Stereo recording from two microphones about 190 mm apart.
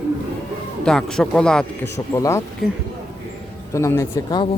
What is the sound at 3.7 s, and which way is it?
Speech, 15° left (ahead or behind).